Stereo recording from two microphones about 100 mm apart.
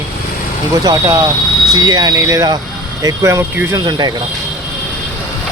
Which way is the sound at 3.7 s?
45° right (ahead or behind).